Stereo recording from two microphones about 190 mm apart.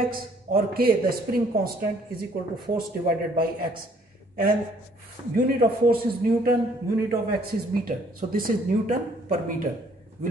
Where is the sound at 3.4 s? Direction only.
50° right (ahead or behind).